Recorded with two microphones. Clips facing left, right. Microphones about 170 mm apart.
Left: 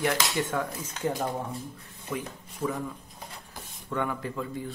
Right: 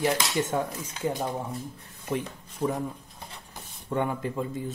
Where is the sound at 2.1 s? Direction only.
30° right (ahead or behind).